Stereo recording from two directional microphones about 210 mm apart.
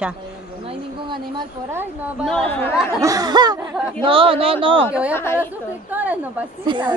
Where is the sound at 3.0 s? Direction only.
15° right (ahead or behind).